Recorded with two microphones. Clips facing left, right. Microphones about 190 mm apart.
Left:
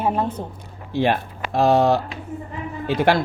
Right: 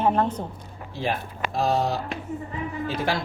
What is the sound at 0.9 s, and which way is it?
Speech, 70° left (ahead or behind).